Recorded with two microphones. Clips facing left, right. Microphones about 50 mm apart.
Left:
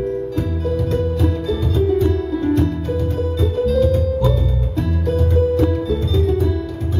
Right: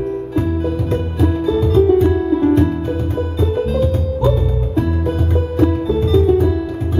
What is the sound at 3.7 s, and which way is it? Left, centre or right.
Music, right.